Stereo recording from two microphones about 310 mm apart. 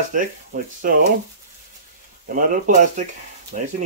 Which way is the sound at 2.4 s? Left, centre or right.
Right.